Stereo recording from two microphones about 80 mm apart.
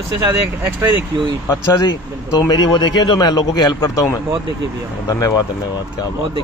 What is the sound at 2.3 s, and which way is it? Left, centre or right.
A man's voice, left.